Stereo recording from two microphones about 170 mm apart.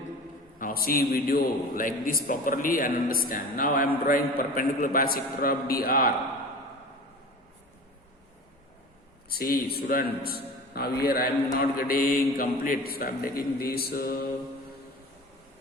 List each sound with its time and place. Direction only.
0.6 s a man's voice: 60° left (ahead or behind)
9.3 s a man's voice: 60° left (ahead or behind)